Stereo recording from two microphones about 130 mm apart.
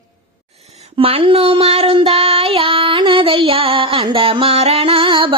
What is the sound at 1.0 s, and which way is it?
Child singing, 45° right (ahead or behind).